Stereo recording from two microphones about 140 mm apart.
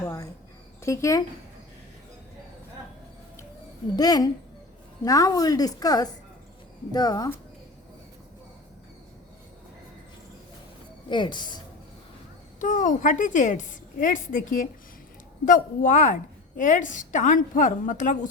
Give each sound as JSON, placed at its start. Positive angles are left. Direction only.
{"t": 0.0, "sound": "a sound", "side_deg": 20}
{"t": 0.8, "sound": "speech", "side_deg": 20}
{"t": 3.9, "sound": "a woman's voice", "side_deg": 25}
{"t": 11.1, "sound": "speech", "side_deg": 35}
{"t": 12.5, "sound": "a woman's voice", "side_deg": 65}